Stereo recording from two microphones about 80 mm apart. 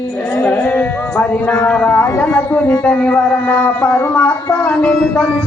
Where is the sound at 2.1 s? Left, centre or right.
Left.